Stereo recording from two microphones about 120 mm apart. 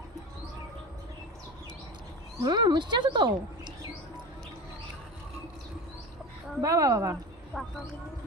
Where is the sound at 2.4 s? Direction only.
40° right (ahead or behind).